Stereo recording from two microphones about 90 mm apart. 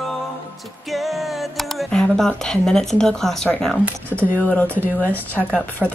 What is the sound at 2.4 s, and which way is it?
Speech, 5° left (ahead or behind).